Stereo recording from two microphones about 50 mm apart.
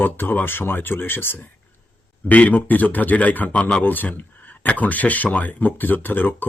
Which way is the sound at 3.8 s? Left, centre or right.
Left.